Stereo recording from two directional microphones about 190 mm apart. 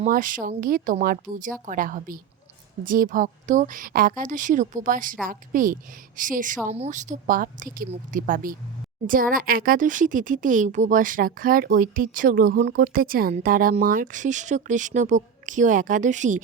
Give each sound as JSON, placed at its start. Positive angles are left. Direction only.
{"t": 0.0, "sound": "speech", "side_deg": -45}